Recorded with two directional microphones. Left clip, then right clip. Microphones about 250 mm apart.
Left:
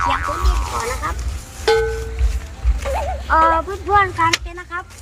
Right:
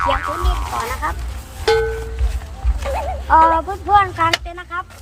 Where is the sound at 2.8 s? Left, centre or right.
Centre.